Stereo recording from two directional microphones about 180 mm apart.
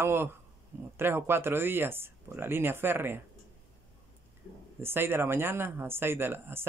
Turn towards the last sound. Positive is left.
turn(degrees=-10)  # may be behind; listen again after turning